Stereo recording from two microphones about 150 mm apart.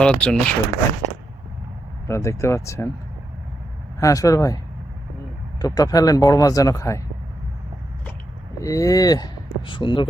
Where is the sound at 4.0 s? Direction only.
20° left (ahead or behind).